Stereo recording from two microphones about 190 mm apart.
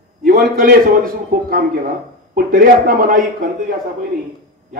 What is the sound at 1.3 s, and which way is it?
A man's voice, 50° right (ahead or behind).